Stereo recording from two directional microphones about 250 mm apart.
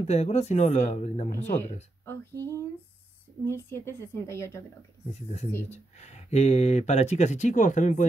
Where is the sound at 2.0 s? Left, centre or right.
Centre.